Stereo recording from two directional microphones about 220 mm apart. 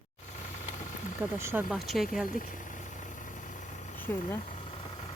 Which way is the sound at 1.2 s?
10° right (ahead or behind).